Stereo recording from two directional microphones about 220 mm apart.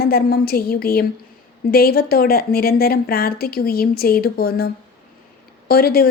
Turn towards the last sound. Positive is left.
turn(degrees=45)  # may be behind; listen again after turning